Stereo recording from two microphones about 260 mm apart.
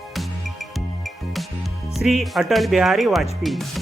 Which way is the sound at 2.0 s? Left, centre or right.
Centre.